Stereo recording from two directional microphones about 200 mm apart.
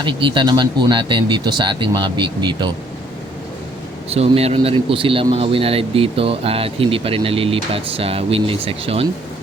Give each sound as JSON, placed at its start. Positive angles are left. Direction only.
{"t": 0.0, "sound": "a man's voice", "side_deg": -25}
{"t": 4.1, "sound": "a man's voice", "side_deg": -30}